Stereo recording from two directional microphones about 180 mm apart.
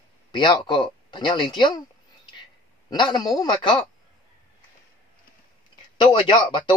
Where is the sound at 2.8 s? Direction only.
25° left (ahead or behind).